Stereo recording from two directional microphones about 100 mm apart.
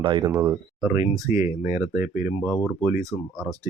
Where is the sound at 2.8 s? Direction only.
30° right (ahead or behind).